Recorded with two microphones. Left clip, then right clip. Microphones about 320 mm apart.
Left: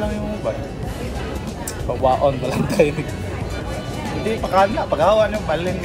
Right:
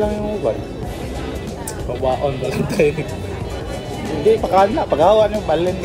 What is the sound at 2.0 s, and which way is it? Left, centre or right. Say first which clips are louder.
Speech: left 2 dB; centre.